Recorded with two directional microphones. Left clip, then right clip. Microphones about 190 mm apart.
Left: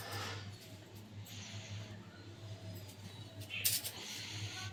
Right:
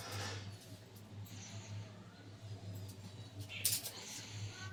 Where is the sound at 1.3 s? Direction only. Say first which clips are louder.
Left 4 dB; centre (ahead or behind).